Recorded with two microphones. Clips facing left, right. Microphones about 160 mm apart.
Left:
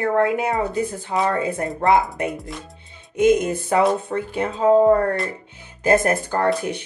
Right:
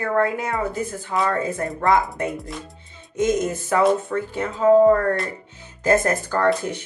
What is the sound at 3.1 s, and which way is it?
Music, 60° left (ahead or behind).